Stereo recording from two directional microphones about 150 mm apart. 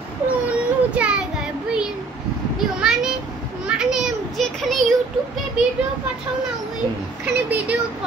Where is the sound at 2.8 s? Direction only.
5° right (ahead or behind).